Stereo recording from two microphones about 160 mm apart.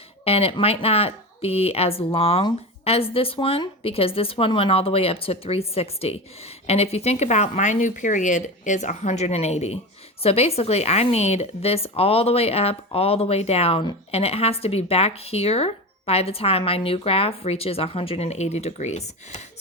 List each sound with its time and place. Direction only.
0.3 s a woman's voice: 35° left (ahead or behind)